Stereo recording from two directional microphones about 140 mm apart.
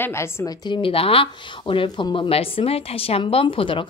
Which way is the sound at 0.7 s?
40° left (ahead or behind).